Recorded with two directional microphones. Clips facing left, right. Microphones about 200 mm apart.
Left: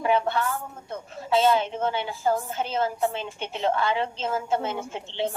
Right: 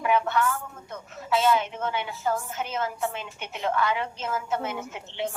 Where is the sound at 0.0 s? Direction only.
30° left (ahead or behind).